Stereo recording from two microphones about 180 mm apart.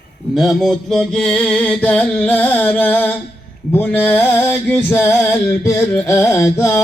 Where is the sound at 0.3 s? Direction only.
Centre (ahead or behind).